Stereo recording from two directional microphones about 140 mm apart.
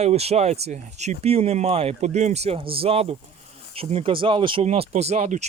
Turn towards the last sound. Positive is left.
turn(degrees=-50)  # may be behind; listen again after turning